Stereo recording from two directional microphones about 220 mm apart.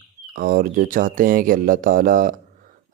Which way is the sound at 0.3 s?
40° right (ahead or behind).